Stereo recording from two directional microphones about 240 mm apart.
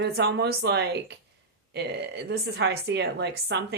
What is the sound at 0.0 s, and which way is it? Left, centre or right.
A woman's voice, right.